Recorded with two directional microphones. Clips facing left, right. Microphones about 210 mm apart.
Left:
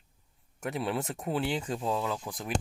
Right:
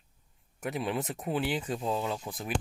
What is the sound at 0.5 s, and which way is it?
Speech, 20° right (ahead or behind).